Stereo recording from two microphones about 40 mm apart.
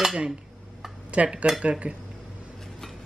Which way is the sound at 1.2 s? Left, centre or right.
Right.